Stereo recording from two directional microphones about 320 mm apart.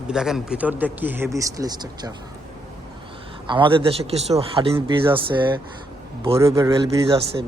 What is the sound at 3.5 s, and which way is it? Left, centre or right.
Speech, centre.